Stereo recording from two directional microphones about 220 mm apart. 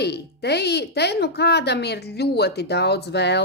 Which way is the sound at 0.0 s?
50° left (ahead or behind).